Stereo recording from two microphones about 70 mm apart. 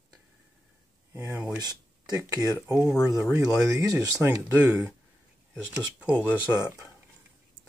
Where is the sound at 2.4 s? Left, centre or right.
Right.